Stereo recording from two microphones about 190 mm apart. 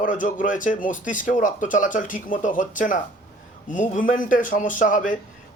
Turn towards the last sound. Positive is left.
turn(degrees=45)  # may be behind; listen again after turning